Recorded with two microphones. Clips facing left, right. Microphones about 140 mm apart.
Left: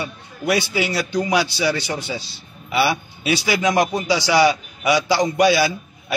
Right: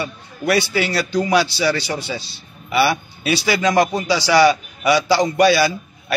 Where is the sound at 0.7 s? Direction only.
10° left (ahead or behind).